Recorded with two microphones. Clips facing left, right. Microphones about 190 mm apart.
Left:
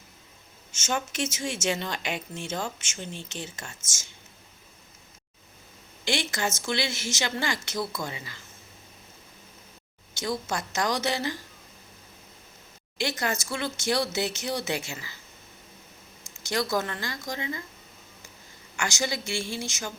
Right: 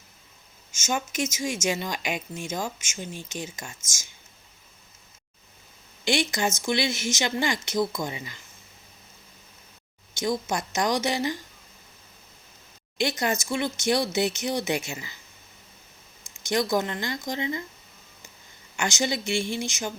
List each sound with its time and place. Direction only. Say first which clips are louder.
0.7 s speech: right 1 dB; 10° right (ahead or behind)
6.1 s speech: right 4 dB; 15° right (ahead or behind)
10.2 s speech: right 3 dB; 15° right (ahead or behind)
13.0 s speech: right 3 dB; 20° right (ahead or behind)
16.4 s speech: right 3 dB; 20° right (ahead or behind)
18.8 s speech: right 3 dB; 20° right (ahead or behind)